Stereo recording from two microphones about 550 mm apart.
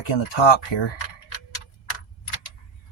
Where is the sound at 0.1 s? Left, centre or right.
Left.